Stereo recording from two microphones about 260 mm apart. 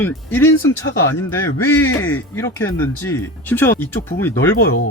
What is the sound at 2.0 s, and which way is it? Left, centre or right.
Speech, centre.